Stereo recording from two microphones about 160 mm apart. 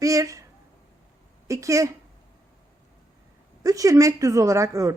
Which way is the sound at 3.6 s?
20° right (ahead or behind).